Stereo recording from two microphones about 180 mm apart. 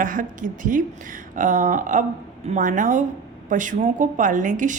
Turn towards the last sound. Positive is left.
turn(degrees=-45)  # may be behind; listen again after turning